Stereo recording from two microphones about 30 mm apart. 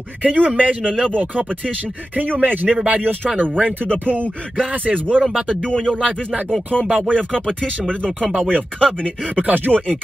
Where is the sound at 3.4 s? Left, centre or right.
Right.